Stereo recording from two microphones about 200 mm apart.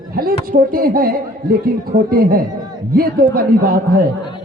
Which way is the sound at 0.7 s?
45° right (ahead or behind).